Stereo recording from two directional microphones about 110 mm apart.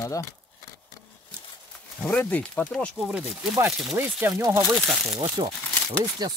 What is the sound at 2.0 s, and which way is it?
Speech, 15° left (ahead or behind).